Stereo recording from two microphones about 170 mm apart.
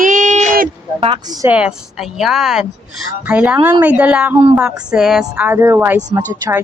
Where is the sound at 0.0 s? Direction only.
50° right (ahead or behind).